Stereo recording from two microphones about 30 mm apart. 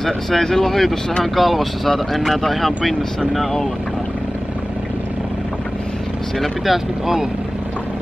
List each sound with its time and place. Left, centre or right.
0.0 s speech: centre
0.5 s speech: centre
1.2 s speech: centre
6.6 s speech: centre